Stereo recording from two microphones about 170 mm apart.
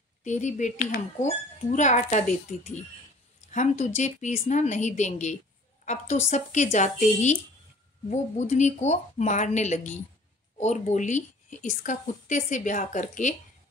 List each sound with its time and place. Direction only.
0.2 s a woman's voice: 45° left (ahead or behind)
3.5 s a woman's voice: 45° left (ahead or behind)